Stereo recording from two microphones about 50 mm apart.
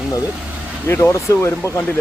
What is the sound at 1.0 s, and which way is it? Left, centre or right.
Speech, left.